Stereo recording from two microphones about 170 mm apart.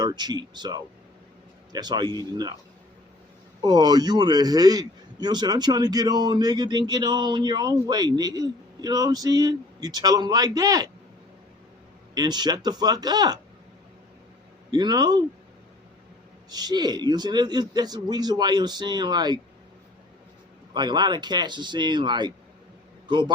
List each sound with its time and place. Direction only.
0.0 s a man's voice: 25° right (ahead or behind)
3.6 s a man's voice: 25° right (ahead or behind)
12.1 s a man's voice: 25° right (ahead or behind)
14.7 s a man's voice: 25° right (ahead or behind)
16.5 s a man's voice: 25° right (ahead or behind)
20.7 s a man's voice: 25° right (ahead or behind)